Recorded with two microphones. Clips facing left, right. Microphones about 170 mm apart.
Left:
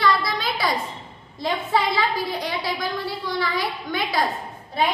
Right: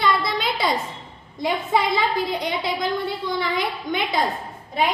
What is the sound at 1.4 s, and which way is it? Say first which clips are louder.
A woman's voice: right 1 dB; 20° right (ahead or behind).